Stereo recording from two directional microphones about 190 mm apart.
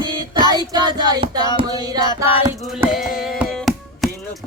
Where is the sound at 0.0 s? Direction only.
20° right (ahead or behind).